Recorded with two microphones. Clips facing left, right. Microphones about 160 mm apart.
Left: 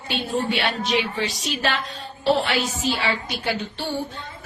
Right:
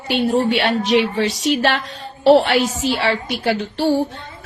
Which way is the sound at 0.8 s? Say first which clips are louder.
Right 7 dB; 90° right.